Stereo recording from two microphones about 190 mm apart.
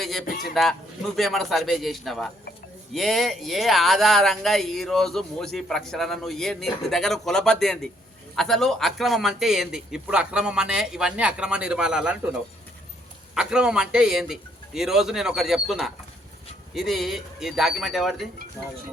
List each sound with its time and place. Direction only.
0.0 s speech: centre (ahead or behind)
0.3 s speech: 50° left (ahead or behind)
0.5 s speech: centre (ahead or behind)
13.3 s speech: 5° right (ahead or behind)